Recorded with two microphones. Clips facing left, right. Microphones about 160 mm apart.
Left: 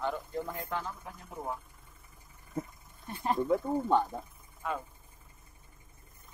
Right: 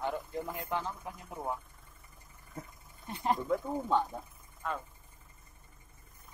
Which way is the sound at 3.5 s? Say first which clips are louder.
Left 3 dB; 10° left (ahead or behind).